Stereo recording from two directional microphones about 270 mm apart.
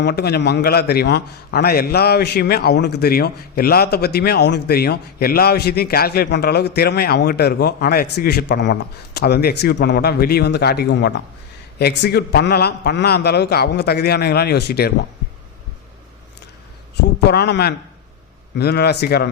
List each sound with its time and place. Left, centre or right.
0.0 s a man's voice: left
16.9 s a man's voice: left